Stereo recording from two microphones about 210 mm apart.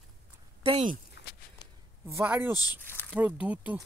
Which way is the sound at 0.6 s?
30° right (ahead or behind).